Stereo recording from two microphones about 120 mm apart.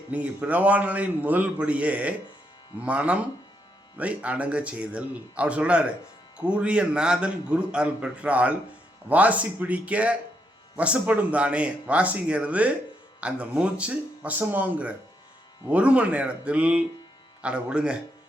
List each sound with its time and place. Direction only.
0.1 s a man's voice: 10° right (ahead or behind)